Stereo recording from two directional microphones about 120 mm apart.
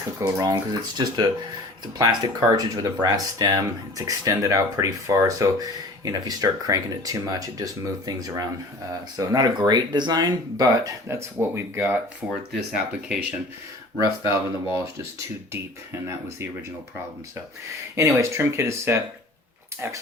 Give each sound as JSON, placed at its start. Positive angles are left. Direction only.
{"t": 0.2, "sound": "speech", "side_deg": -25}
{"t": 12.5, "sound": "speech", "side_deg": -5}
{"t": 13.9, "sound": "speech", "side_deg": 35}
{"t": 14.3, "sound": "speech", "side_deg": -20}
{"t": 18.2, "sound": "speech", "side_deg": -25}